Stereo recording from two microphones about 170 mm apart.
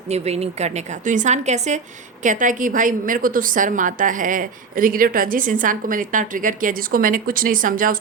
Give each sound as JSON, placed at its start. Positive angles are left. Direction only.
{"t": 0.1, "sound": "a woman's voice", "side_deg": -40}